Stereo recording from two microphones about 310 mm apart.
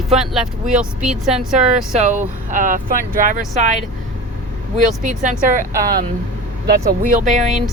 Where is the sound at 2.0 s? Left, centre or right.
Right.